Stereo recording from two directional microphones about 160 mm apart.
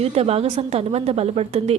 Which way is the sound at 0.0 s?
40° right (ahead or behind).